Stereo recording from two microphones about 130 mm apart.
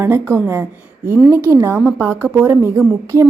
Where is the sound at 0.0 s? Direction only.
20° right (ahead or behind).